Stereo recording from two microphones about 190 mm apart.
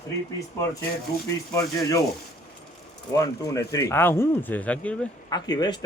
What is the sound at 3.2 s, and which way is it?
Speech, 15° left (ahead or behind).